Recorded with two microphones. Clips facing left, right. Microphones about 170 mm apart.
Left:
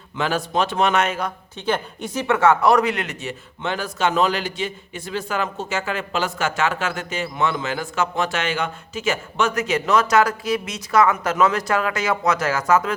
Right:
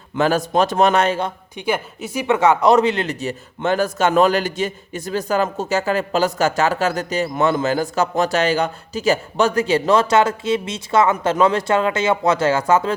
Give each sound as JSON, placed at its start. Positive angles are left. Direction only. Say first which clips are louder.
{"t": 0.2, "sound": "speech", "louder": "right 5 dB", "side_deg": -40}
{"t": 1.5, "sound": "speech", "louder": "right 1 dB", "side_deg": -10}